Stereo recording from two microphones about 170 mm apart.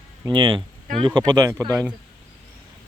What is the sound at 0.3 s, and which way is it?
Speech, 30° right (ahead or behind).